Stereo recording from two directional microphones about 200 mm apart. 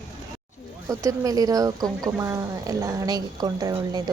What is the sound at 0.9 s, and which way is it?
Speech, 15° right (ahead or behind).